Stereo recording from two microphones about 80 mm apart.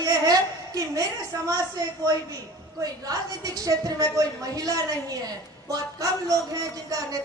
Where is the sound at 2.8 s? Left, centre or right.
Right.